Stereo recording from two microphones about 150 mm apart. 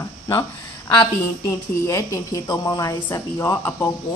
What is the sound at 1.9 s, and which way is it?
A woman's voice, 20° left (ahead or behind).